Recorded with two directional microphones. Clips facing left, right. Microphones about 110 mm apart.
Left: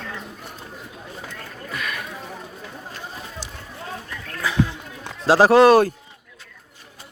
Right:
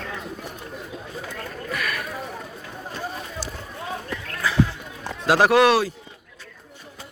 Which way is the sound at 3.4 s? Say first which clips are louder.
Right 4 dB; 20° left (ahead or behind).